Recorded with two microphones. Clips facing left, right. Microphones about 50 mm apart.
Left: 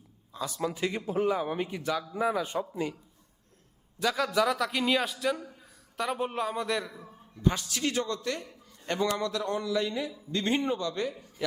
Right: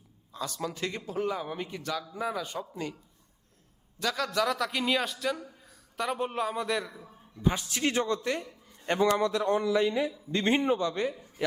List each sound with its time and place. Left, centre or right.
0.3 s a man's voice: centre
4.0 s a man's voice: centre
7.7 s a man's voice: right